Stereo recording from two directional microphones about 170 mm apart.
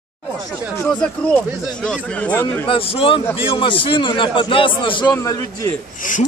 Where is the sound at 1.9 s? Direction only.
10° left (ahead or behind).